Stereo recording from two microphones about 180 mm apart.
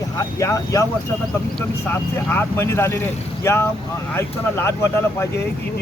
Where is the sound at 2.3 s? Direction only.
10° left (ahead or behind).